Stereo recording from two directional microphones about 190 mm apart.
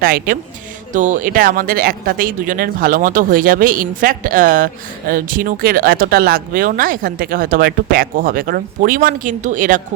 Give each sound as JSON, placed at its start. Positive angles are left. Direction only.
{"t": 0.0, "sound": "speech", "side_deg": -50}